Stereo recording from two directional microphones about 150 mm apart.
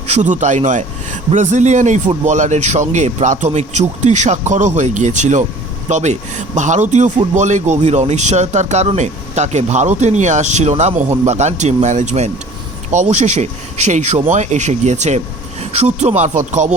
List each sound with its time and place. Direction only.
0.1 s a man's voice: 55° right (ahead or behind)